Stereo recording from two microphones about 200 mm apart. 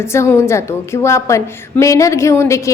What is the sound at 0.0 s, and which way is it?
A woman's voice, 15° left (ahead or behind).